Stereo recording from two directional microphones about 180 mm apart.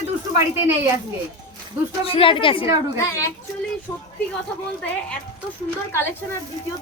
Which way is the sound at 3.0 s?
15° left (ahead or behind).